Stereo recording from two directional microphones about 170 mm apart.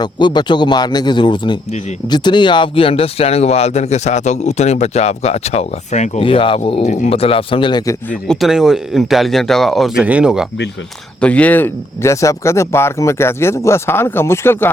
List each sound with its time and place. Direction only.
0.0 s speech: 25° left (ahead or behind)
8.3 s speech: centre (ahead or behind)
11.2 s speech: 10° left (ahead or behind)